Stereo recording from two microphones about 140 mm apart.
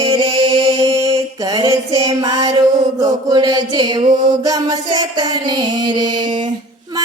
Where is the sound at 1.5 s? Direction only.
30° right (ahead or behind).